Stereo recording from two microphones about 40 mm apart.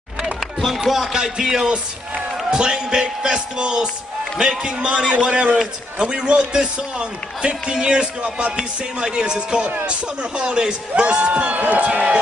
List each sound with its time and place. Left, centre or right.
0.4 s a sound: centre
0.7 s chopping: centre
2.5 s a man's voice: centre
11.5 s speech: right
11.8 s a man's voice: right